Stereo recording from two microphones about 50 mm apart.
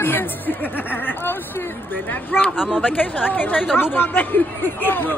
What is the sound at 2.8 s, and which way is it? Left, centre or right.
A man's voice, left.